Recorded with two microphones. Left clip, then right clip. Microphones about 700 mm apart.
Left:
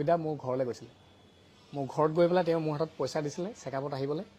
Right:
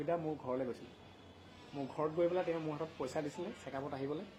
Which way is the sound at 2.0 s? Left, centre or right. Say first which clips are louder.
Left 9 dB; left.